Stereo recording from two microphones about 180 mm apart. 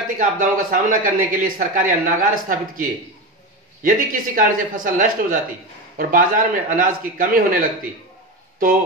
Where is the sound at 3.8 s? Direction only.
50° right (ahead or behind).